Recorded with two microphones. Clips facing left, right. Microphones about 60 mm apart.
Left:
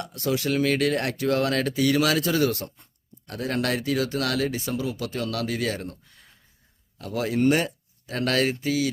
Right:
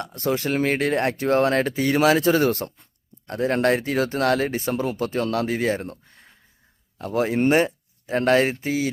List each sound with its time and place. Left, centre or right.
0.0 s speech: right